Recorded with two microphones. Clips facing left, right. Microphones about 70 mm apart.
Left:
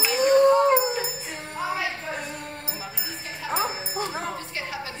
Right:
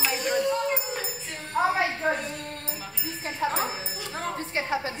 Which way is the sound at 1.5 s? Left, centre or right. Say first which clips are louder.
Right 5 dB; right.